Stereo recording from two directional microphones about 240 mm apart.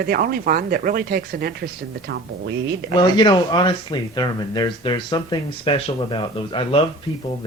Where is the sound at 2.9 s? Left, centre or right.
Centre.